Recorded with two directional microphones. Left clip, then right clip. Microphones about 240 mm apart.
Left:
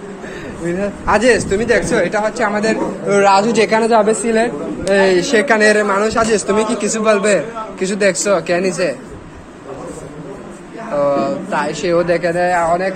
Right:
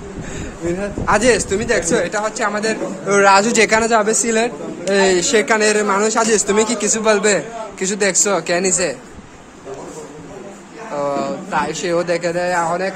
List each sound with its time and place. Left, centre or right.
0.7 s speech: centre
11.0 s speech: centre